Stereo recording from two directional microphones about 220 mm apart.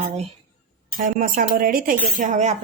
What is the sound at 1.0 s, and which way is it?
Speech, 40° right (ahead or behind).